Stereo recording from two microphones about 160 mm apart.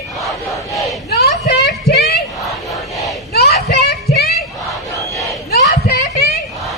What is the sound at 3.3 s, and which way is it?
Children playing, 80° left.